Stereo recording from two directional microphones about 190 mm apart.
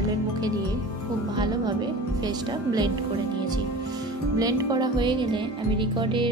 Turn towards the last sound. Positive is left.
turn(degrees=-25)  # may be behind; listen again after turning